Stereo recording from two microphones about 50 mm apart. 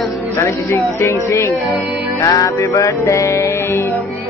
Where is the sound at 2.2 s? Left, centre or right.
Left.